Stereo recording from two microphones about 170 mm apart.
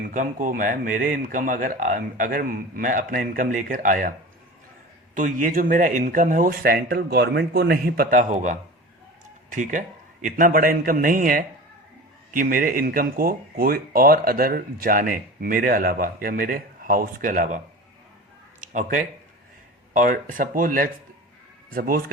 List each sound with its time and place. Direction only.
0.1 s speech: 50° right (ahead or behind)
5.1 s speech: 50° right (ahead or behind)
18.7 s speech: 50° right (ahead or behind)